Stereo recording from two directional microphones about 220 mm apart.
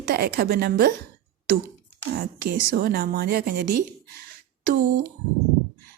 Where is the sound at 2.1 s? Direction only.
40° right (ahead or behind).